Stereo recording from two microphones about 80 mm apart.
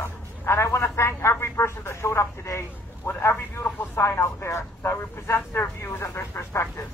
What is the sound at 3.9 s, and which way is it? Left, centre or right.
A man's voice, left.